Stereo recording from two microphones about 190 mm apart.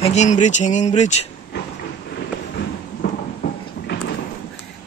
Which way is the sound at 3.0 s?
55° left (ahead or behind).